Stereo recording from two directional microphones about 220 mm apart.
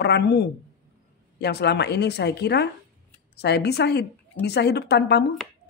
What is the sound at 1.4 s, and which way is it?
Speech, 50° left (ahead or behind).